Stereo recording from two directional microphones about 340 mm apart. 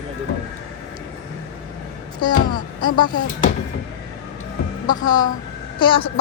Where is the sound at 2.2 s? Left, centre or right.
Centre.